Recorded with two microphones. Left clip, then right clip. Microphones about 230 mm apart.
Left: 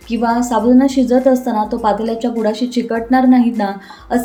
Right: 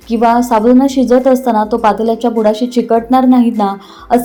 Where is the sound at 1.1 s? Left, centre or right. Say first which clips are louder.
Right 6 dB; centre.